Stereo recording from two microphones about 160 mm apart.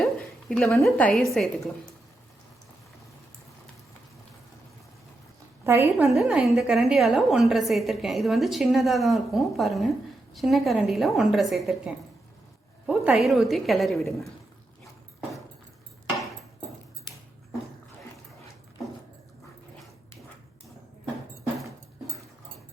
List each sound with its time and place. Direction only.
0.0 s a sound: 5° left (ahead or behind)
0.9 s a woman's voice: 5° left (ahead or behind)
5.6 s a woman's voice: 15° right (ahead or behind)
6.1 s a woman's voice: centre (ahead or behind)
12.8 s a woman's voice: 5° right (ahead or behind)